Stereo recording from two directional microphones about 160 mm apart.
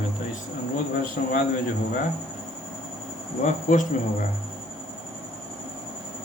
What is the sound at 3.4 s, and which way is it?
Speech, 55° left (ahead or behind).